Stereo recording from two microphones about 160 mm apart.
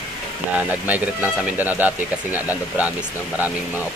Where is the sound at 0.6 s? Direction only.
10° right (ahead or behind).